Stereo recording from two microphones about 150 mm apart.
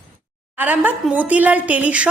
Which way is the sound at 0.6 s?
10° right (ahead or behind).